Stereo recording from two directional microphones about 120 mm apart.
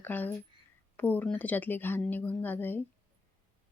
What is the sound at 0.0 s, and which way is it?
Speech, 15° left (ahead or behind).